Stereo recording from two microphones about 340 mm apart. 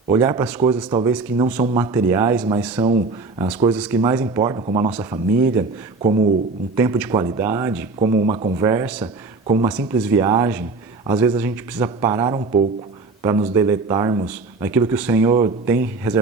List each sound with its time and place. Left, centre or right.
0.1 s speech: centre
2.7 s speech: centre
3.8 s speech: centre